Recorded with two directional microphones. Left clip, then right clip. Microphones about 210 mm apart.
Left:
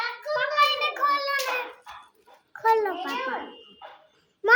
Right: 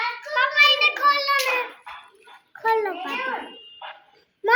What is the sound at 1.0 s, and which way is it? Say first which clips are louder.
Child singing: right 5 dB; 50° left (ahead or behind).